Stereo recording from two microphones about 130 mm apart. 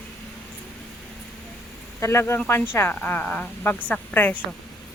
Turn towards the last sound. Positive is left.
turn(degrees=15)  # may be behind; listen again after turning